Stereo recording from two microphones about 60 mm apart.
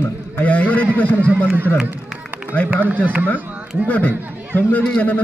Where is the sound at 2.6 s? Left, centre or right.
Right.